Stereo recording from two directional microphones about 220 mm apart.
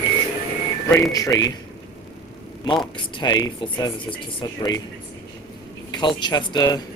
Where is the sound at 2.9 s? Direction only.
20° left (ahead or behind).